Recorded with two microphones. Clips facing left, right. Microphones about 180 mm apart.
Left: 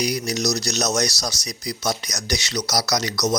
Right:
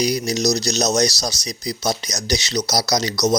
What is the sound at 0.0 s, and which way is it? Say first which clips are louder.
Speech: right 4 dB; 35° right (ahead or behind).